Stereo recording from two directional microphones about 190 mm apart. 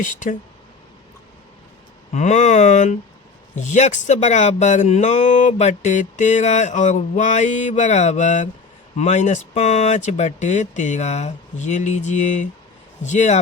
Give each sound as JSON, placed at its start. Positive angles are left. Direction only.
{"t": 0.0, "sound": "speech", "side_deg": 45}
{"t": 2.1, "sound": "speech", "side_deg": 40}